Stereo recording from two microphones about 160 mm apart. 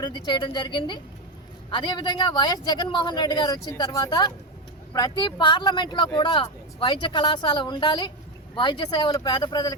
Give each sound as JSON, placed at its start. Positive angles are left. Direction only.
{"t": 0.0, "sound": "speech", "side_deg": 30}